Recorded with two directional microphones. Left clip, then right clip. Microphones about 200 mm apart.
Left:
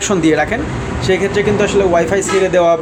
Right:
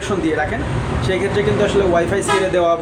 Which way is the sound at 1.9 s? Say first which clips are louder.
Left 3 dB; 30° left (ahead or behind).